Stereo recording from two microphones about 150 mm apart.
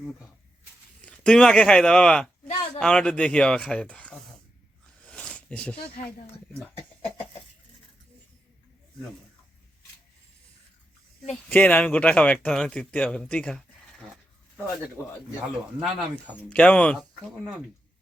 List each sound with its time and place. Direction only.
1.0 s speech: 5° left (ahead or behind)
5.0 s a sound: 5° left (ahead or behind)
11.3 s speech: 5° left (ahead or behind)
15.0 s speech: 15° left (ahead or behind)
15.4 s speech: centre (ahead or behind)
16.5 s speech: 10° left (ahead or behind)